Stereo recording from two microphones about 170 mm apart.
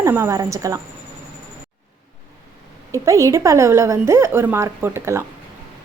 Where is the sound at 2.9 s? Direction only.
20° right (ahead or behind).